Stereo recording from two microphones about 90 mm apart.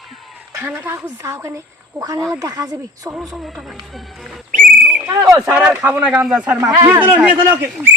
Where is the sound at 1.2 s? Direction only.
35° right (ahead or behind).